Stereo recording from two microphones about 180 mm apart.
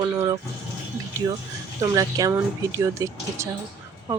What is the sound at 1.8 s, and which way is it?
Speech, 20° right (ahead or behind).